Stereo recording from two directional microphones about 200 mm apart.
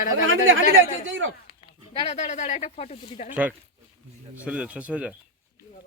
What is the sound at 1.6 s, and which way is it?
Speech, 30° left (ahead or behind).